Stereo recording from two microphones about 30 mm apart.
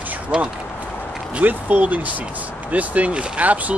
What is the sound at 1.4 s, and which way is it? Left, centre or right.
Speech, right.